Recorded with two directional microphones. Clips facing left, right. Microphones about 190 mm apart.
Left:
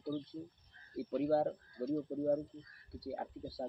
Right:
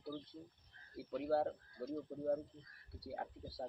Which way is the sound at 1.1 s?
5° left (ahead or behind).